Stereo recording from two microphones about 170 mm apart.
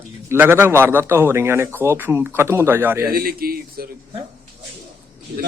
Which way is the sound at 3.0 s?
60° right (ahead or behind).